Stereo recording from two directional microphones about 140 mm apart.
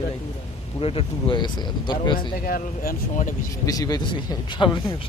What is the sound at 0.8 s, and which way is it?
Speech, 40° left (ahead or behind).